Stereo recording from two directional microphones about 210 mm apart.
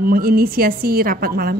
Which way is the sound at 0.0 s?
45° right (ahead or behind).